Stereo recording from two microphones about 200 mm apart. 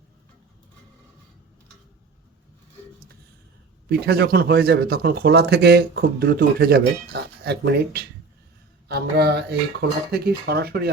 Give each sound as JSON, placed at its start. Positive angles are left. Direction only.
{"t": 3.8, "sound": "speech", "side_deg": -50}